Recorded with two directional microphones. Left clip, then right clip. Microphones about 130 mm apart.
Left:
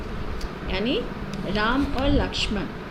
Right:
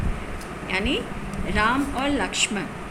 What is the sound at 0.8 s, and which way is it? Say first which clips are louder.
A woman's voice: left 1 dB; 55° left (ahead or behind).